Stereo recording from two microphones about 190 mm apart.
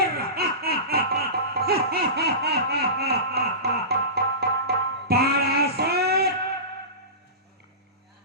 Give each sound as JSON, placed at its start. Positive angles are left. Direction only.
{"t": 0.0, "sound": "music", "side_deg": -55}